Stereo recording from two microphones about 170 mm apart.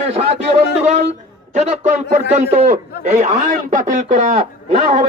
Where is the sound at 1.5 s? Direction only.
40° right (ahead or behind).